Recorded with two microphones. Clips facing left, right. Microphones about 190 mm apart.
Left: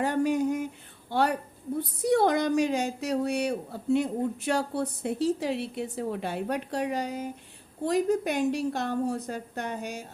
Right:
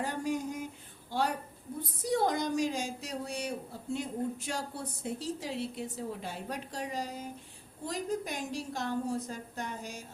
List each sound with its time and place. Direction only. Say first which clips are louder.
0.0 s a woman's voice: left 8 dB; 65° left (ahead or behind)